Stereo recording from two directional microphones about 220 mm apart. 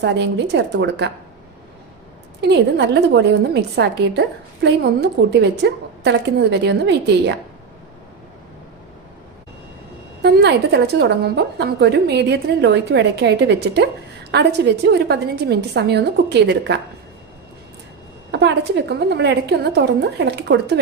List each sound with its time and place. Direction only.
0.0 s a woman's voice: 50° right (ahead or behind)
2.4 s a woman's voice: 50° right (ahead or behind)
10.2 s a woman's voice: 50° right (ahead or behind)
18.3 s a woman's voice: 50° right (ahead or behind)